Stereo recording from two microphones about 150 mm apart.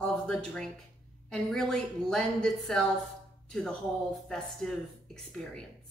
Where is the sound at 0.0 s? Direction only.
5° left (ahead or behind).